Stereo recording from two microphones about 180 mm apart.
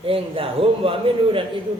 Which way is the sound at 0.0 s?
30° right (ahead or behind).